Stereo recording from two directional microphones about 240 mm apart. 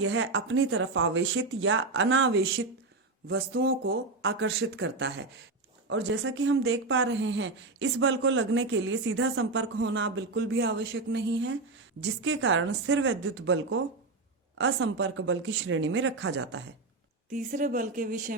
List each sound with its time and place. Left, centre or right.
0.0 s a woman's voice: right
17.3 s speech: right